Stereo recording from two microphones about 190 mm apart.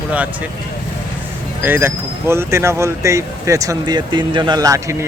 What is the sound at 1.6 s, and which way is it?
Speech, 10° right (ahead or behind).